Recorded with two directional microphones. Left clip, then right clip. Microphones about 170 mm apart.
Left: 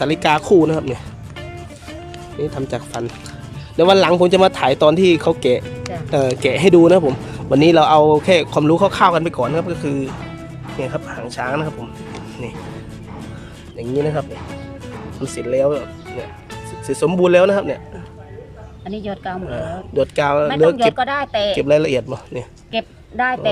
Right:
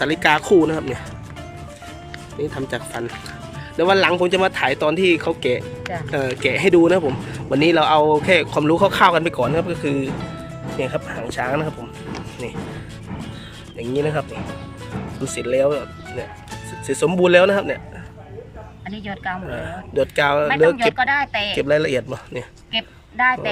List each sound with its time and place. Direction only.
0.0 s speech: 10° left (ahead or behind)
2.6 s speech: 10° left (ahead or behind)
13.7 s speech: 5° left (ahead or behind)
18.9 s a woman's voice: 40° left (ahead or behind)
19.5 s speech: 5° left (ahead or behind)
20.9 s a woman's voice: 45° left (ahead or behind)
21.5 s speech: 10° left (ahead or behind)
22.7 s a woman's voice: 45° left (ahead or behind)